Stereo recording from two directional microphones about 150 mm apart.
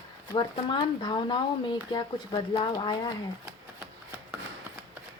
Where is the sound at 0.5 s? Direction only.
30° left (ahead or behind).